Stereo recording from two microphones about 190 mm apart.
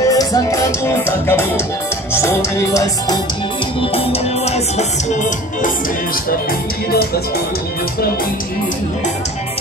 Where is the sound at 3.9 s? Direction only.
35° left (ahead or behind).